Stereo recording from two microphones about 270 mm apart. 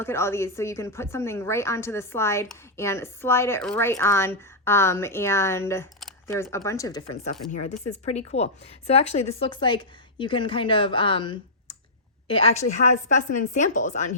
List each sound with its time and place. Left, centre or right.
0.0 s a woman's voice: centre; by 14.2 s left